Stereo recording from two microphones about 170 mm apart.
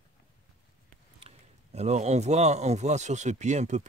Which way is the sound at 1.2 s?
40° right (ahead or behind).